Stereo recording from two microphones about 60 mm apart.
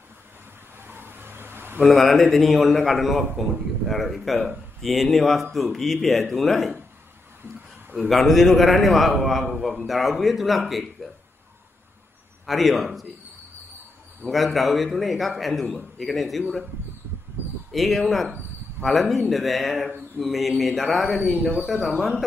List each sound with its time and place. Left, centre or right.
0.8 s insect: right
1.8 s speech: centre
8.1 s speech: centre
12.4 s speech: centre
14.2 s speech: centre
17.6 s speech: centre